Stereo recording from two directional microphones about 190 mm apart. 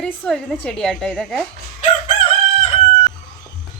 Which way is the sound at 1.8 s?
35° left (ahead or behind).